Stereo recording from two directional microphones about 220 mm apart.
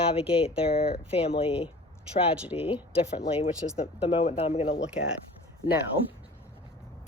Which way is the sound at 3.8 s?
25° left (ahead or behind).